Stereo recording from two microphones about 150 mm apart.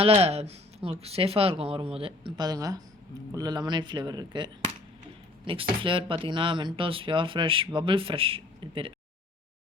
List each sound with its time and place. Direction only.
0.0 s speech: 40° right (ahead or behind)